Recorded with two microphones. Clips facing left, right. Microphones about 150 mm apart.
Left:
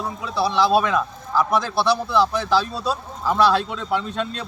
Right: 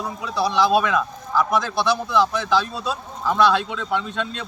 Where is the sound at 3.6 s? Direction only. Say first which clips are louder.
Left 1 dB; 5° left (ahead or behind).